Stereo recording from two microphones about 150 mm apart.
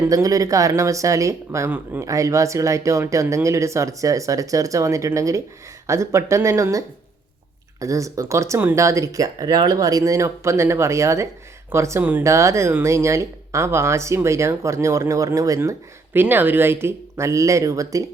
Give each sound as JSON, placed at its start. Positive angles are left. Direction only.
{"t": 0.0, "sound": "speech", "side_deg": -25}